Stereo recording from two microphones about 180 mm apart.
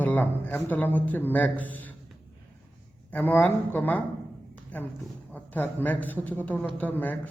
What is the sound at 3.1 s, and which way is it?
Speech, 10° left (ahead or behind).